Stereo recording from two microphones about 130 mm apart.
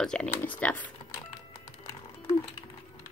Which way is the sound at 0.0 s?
5° left (ahead or behind).